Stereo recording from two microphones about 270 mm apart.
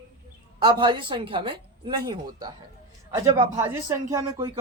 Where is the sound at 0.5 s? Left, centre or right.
Centre.